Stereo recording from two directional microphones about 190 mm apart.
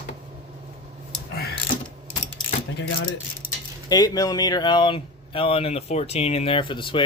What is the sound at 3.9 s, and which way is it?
A man's voice, 20° left (ahead or behind).